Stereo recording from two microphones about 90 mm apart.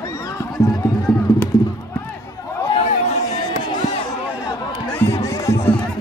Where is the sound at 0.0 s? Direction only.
35° left (ahead or behind).